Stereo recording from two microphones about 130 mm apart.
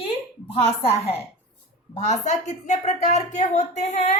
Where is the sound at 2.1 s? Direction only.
65° left (ahead or behind).